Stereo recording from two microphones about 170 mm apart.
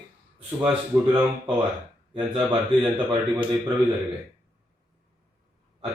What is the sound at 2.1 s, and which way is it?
Speech, 30° right (ahead or behind).